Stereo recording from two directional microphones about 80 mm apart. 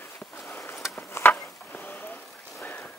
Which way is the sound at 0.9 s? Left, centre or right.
Left.